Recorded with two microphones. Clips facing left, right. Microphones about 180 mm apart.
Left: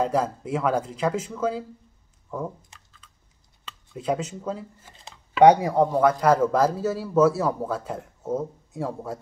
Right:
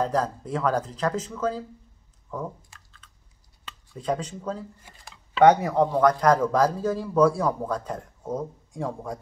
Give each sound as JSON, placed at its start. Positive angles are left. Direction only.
{"t": 0.0, "sound": "speech", "side_deg": 10}
{"t": 2.7, "sound": "chewing", "side_deg": 20}
{"t": 3.9, "sound": "speech", "side_deg": 5}